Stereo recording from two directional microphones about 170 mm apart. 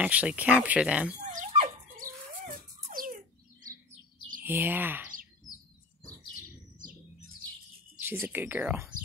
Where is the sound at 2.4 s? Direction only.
55° right (ahead or behind).